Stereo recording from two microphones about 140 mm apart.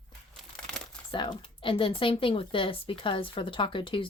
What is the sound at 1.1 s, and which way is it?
Speech, 35° left (ahead or behind).